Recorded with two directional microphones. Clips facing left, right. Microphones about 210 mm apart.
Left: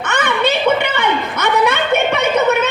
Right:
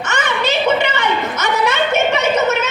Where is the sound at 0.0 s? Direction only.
55° left (ahead or behind).